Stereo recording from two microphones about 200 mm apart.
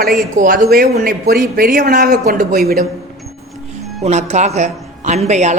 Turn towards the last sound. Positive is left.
turn(degrees=-35)  # may be behind; listen again after turning